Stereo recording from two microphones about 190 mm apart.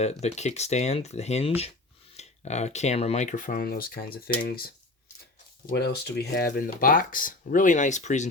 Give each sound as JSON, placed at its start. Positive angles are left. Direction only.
{"t": 0.0, "sound": "speech", "side_deg": 35}
{"t": 5.7, "sound": "speech", "side_deg": 60}